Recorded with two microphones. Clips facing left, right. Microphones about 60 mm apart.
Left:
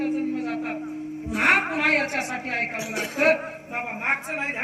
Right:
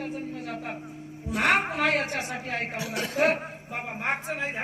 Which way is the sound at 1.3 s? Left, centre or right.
Left.